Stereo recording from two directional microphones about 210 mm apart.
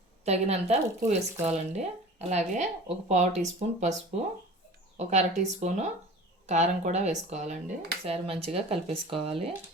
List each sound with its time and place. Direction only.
0.3 s a woman's voice: 30° right (ahead or behind)
4.9 s a woman's voice: 35° right (ahead or behind)
8.0 s dishes: 30° right (ahead or behind)